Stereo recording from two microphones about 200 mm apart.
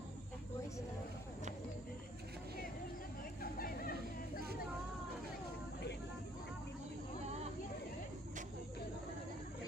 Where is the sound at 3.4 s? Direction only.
45° left (ahead or behind).